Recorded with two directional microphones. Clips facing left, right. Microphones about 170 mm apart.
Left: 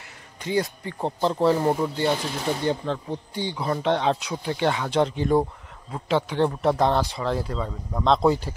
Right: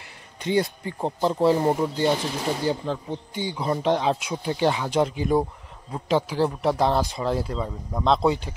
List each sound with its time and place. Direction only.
0.4 s speech: 20° right (ahead or behind)
1.0 s speech: 10° right (ahead or behind)
3.3 s speech: 20° right (ahead or behind)
3.9 s speech: 5° right (ahead or behind)
4.3 s speech: 25° right (ahead or behind)
4.7 s speech: 10° right (ahead or behind)